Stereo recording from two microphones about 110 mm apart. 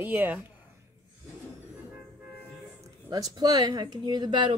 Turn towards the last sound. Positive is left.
turn(degrees=-45)  # may be behind; listen again after turning